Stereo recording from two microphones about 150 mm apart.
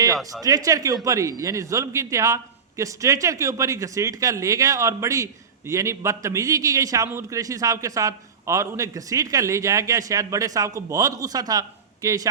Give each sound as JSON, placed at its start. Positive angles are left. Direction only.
{"t": 0.4, "sound": "a man's voice", "side_deg": -25}